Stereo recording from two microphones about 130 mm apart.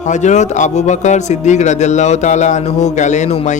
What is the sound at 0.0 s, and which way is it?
Speech, 70° left (ahead or behind).